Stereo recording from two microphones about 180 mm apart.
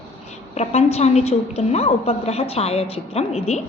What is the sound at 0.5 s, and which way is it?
A woman's voice, 35° left (ahead or behind).